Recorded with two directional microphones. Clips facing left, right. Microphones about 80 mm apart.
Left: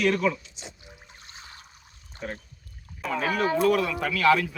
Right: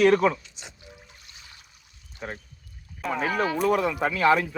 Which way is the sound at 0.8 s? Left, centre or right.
Left.